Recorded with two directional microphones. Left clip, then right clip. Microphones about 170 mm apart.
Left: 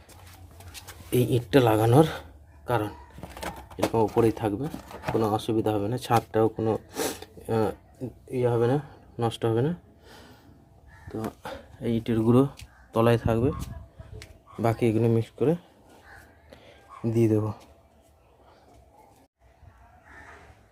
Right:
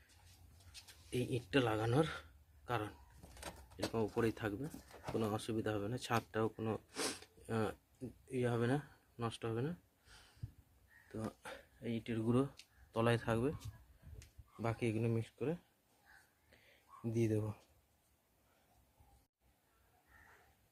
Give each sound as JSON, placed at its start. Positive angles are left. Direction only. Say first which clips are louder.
{"t": 1.1, "sound": "speech", "louder": "left 15 dB", "side_deg": 20}
{"t": 2.6, "sound": "speech", "louder": "left 14 dB", "side_deg": 5}
{"t": 3.9, "sound": "speech", "louder": "left 15 dB", "side_deg": 0}
{"t": 8.3, "sound": "speech", "louder": "left 13 dB", "side_deg": -20}
{"t": 9.1, "sound": "speech", "louder": "left 16 dB", "side_deg": 5}
{"t": 11.4, "sound": "speech", "louder": "left 15 dB", "side_deg": 10}
{"t": 14.6, "sound": "speech", "louder": "left 15 dB", "side_deg": 10}
{"t": 16.5, "sound": "a sound", "louder": "left 14 dB", "side_deg": 10}
{"t": 17.2, "sound": "speech", "louder": "left 14 dB", "side_deg": 0}